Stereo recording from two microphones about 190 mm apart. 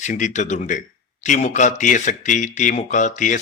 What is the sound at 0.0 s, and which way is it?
A man's voice, 40° left (ahead or behind).